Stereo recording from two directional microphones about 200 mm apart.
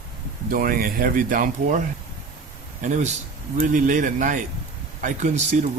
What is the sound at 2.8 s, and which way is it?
Speech, 35° right (ahead or behind).